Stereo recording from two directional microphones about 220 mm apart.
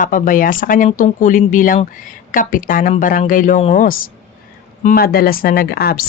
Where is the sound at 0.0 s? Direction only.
40° left (ahead or behind).